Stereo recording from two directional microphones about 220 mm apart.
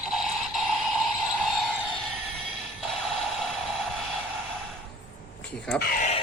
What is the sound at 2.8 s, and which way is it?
Music, centre (ahead or behind).